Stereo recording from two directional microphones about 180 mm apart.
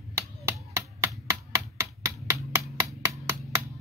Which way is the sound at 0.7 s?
15° right (ahead or behind).